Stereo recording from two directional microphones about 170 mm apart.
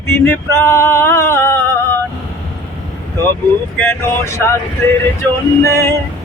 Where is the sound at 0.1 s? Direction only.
15° left (ahead or behind).